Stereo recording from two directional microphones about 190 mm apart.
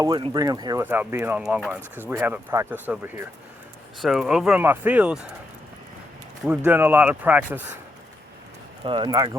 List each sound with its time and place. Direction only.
0.1 s speech: 25° right (ahead or behind); by 5.2 s 5° right (ahead or behind)
6.7 s speech: 10° right (ahead or behind)
8.8 s speech: 25° right (ahead or behind)